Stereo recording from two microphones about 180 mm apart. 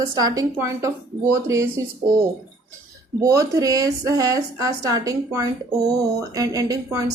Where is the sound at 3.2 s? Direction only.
20° right (ahead or behind).